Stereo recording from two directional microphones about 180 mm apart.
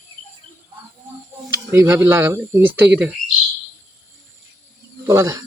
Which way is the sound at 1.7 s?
15° right (ahead or behind).